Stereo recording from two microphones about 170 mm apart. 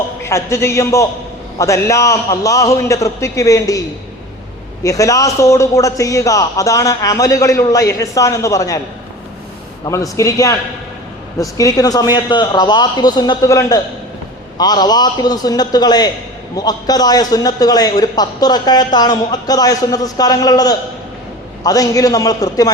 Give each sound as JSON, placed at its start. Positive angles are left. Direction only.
{"t": 0.2, "sound": "a man's voice", "side_deg": 15}
{"t": 9.8, "sound": "a man's voice", "side_deg": 20}